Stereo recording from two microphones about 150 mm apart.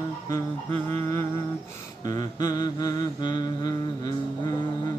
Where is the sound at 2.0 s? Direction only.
25° left (ahead or behind).